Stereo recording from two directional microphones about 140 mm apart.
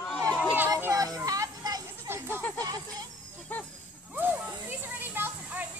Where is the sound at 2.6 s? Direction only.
30° right (ahead or behind).